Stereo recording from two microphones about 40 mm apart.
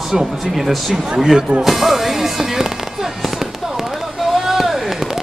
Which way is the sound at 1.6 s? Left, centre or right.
Centre.